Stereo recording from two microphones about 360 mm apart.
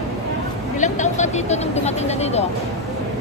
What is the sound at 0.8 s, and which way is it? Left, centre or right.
Vehicle, centre.